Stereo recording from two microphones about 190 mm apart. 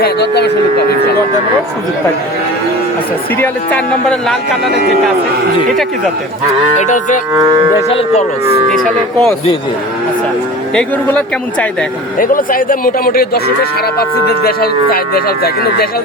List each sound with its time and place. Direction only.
0.0 s speech: 60° left (ahead or behind)
3.3 s speech: 10° left (ahead or behind)
4.6 s speech: 60° right (ahead or behind)
6.7 s livestock: 40° left (ahead or behind)
8.4 s speech: 30° right (ahead or behind)
8.7 s speech: centre (ahead or behind)
12.2 s speech: 45° left (ahead or behind)